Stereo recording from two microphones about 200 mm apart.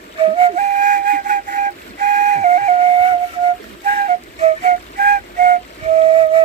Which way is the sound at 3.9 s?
35° right (ahead or behind).